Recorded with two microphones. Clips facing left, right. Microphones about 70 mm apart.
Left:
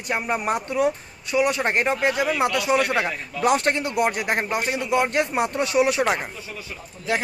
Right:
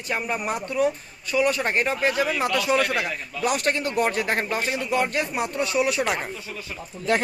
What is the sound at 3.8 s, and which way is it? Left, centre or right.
Speech, centre.